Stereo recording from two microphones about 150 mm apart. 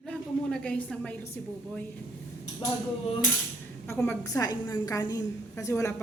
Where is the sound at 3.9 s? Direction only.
15° left (ahead or behind).